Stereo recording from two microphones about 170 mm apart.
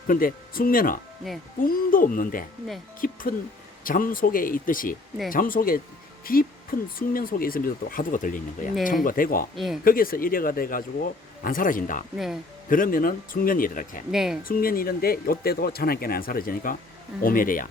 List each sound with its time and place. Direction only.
0.1 s speech: 55° left (ahead or behind)
9.6 s speech: centre (ahead or behind)
9.8 s speech: 55° left (ahead or behind)
12.1 s speech: centre (ahead or behind)
12.6 s speech: 55° left (ahead or behind)
14.1 s speech: centre (ahead or behind)
14.4 s speech: 55° left (ahead or behind)